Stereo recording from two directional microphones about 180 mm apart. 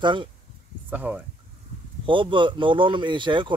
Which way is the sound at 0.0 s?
25° right (ahead or behind).